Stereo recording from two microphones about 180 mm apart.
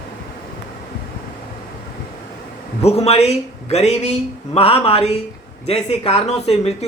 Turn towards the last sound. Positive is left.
turn(degrees=35)  # may be behind; listen again after turning